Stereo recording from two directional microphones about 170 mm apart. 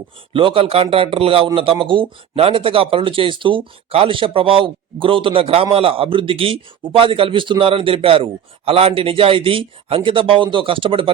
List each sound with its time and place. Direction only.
0.3 s speech: 30° right (ahead or behind)